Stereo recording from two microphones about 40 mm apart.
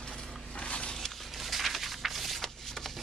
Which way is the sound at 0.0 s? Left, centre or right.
Left.